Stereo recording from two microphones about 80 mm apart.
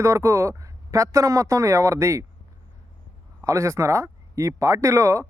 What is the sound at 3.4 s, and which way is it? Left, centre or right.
Speech, right.